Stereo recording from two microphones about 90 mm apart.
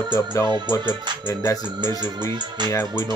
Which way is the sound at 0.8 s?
55° right (ahead or behind).